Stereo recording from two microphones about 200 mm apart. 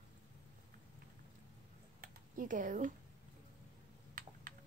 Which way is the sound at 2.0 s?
40° right (ahead or behind).